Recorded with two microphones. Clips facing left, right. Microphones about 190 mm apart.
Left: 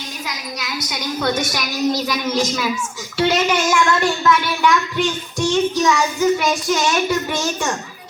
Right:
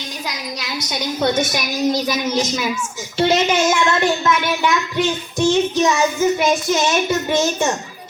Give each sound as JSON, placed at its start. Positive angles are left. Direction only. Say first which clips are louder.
{"t": 0.6, "sound": "a woman's voice", "louder": "right 2 dB", "side_deg": -25}